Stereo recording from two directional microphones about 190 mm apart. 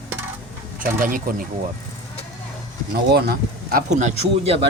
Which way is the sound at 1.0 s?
45° right (ahead or behind).